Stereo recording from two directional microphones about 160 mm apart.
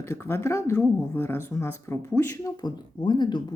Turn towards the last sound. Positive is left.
turn(degrees=30)  # may be behind; listen again after turning